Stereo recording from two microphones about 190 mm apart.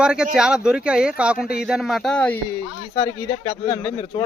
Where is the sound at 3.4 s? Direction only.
25° left (ahead or behind).